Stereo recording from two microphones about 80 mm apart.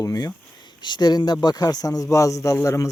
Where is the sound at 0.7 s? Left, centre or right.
Left.